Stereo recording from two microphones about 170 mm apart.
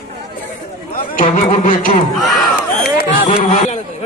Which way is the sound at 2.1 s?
Centre (ahead or behind).